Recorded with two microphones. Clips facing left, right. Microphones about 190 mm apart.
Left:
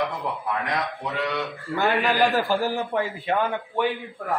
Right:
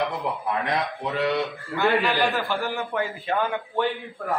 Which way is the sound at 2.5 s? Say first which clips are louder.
Left 3 dB; 35° left (ahead or behind).